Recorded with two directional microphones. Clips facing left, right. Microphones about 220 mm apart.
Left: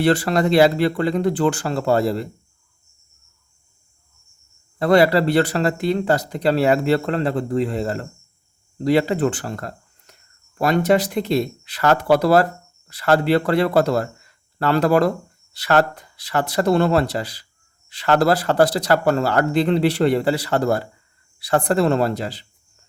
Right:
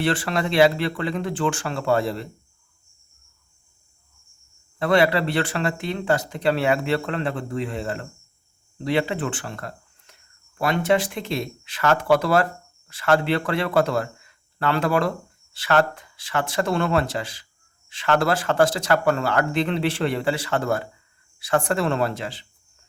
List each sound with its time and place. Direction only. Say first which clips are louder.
0.0 s speech: left 6 dB; 40° left (ahead or behind)
4.8 s speech: left 4 dB; 40° left (ahead or behind)